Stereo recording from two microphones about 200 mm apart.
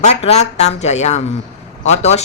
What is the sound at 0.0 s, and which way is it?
A woman's voice, 35° left (ahead or behind).